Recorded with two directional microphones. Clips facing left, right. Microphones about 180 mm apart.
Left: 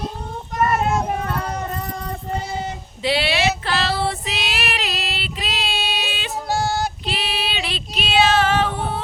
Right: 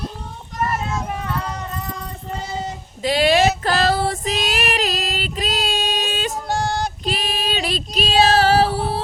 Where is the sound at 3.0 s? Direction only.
45° right (ahead or behind).